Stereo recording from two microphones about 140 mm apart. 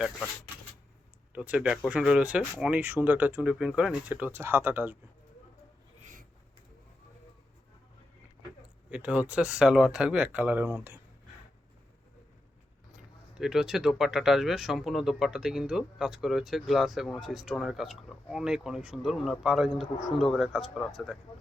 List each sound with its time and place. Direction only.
1.3 s speech: 10° right (ahead or behind)
6.0 s a sound: 65° right (ahead or behind)
8.9 s speech: 10° right (ahead or behind)
13.4 s speech: 5° right (ahead or behind)